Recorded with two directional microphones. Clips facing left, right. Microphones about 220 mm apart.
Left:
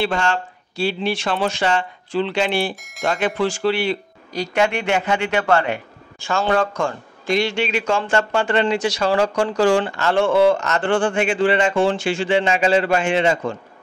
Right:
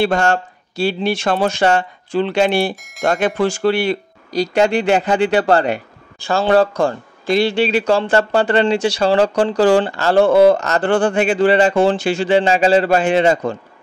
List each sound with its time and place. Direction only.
0.0 s speech: 45° right (ahead or behind)